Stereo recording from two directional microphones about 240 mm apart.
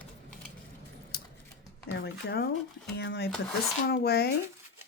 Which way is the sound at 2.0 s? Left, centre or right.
Left.